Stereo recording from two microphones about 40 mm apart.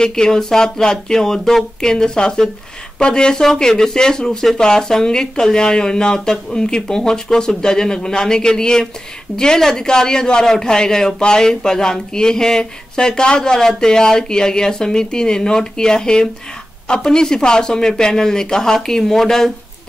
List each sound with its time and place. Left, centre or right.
0.0 s speech: centre